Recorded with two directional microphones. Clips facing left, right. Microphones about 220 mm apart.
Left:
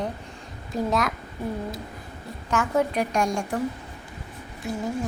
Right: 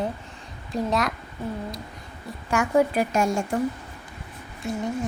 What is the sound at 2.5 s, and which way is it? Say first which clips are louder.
A woman's voice: right 3 dB; 10° right (ahead or behind).